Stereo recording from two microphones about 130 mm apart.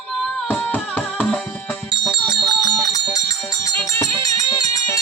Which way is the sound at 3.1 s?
25° left (ahead or behind).